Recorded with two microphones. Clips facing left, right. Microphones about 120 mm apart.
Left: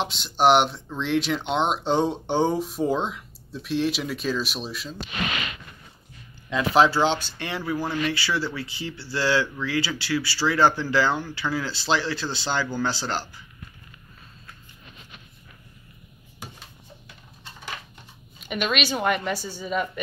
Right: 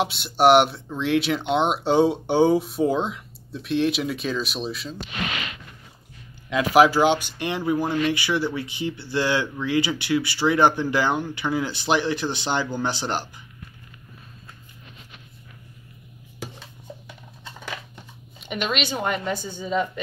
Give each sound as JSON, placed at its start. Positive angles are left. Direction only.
{"t": 0.0, "sound": "speech", "side_deg": -5}
{"t": 6.5, "sound": "speech", "side_deg": -15}
{"t": 18.7, "sound": "speech", "side_deg": -20}
{"t": 19.6, "sound": "speech", "side_deg": 10}